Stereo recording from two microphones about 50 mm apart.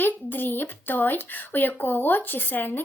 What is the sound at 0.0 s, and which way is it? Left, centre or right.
Speech, left.